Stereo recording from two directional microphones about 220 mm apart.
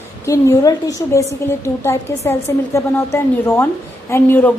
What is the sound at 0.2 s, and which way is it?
A woman's voice, 15° left (ahead or behind).